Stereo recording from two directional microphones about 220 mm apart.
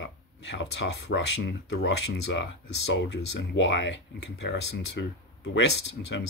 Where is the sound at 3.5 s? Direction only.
55° left (ahead or behind).